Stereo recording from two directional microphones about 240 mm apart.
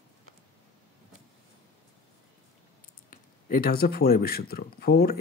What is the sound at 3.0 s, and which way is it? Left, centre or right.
Speech, left.